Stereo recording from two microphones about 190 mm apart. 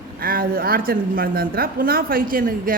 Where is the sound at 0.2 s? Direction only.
50° right (ahead or behind).